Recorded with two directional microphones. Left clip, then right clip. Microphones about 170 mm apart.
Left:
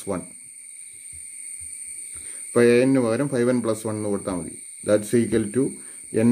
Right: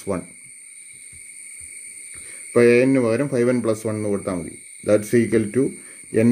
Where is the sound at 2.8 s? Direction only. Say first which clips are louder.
Right 2 dB; 15° right (ahead or behind).